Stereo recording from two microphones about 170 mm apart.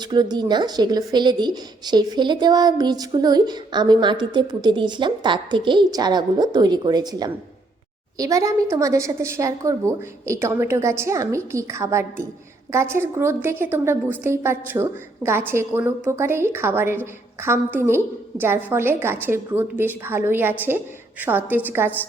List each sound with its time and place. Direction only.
0.0 s a woman's voice: 25° right (ahead or behind)